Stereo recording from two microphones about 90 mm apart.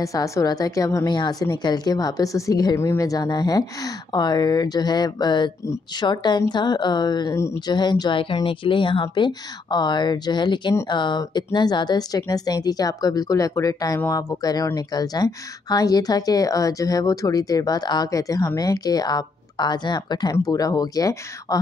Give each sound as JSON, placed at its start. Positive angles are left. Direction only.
{"t": 0.0, "sound": "a woman's voice", "side_deg": 40}
{"t": 1.0, "sound": "speech", "side_deg": 55}